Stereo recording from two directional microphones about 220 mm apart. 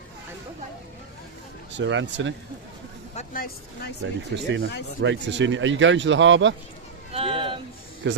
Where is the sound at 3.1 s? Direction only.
40° left (ahead or behind).